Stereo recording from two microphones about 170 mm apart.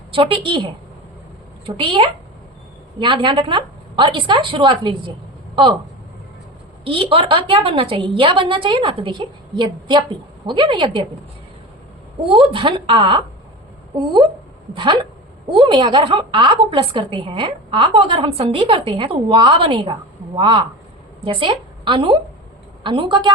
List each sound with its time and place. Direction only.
0.1 s a woman's voice: 30° right (ahead or behind)
6.8 s a woman's voice: 30° right (ahead or behind)
12.3 s a woman's voice: 30° right (ahead or behind)